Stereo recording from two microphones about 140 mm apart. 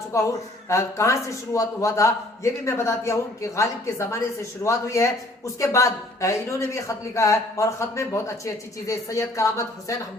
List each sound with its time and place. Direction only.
0.1 s speech: 20° left (ahead or behind)